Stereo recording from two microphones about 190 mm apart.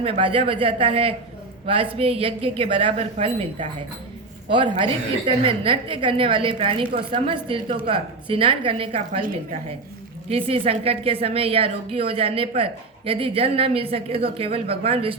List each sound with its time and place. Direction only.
0.0 s a woman's voice: 30° right (ahead or behind)
10.2 s a woman's voice: 30° right (ahead or behind)